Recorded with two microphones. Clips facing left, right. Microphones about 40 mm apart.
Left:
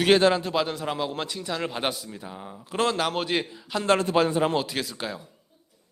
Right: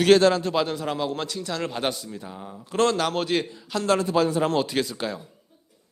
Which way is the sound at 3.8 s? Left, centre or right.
Left.